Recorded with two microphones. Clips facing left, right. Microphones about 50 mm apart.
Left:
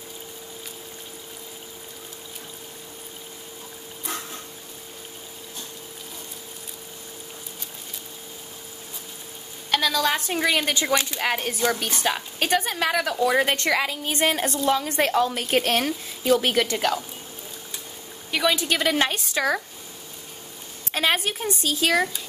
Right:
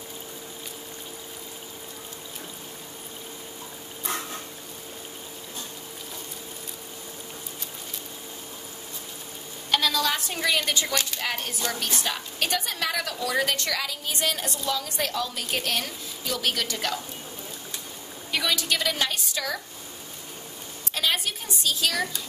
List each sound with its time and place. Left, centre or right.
9.9 s a woman's voice: left
16.3 s a woman's voice: left
18.4 s a woman's voice: left
20.9 s a woman's voice: left